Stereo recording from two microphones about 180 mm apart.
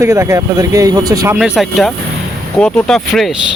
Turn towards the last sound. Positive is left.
turn(degrees=0)  # may be behind; listen again after turning